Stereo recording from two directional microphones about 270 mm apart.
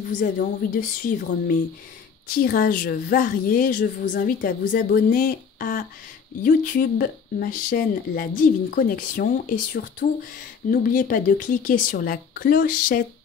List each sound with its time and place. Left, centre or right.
0.1 s a woman's voice: left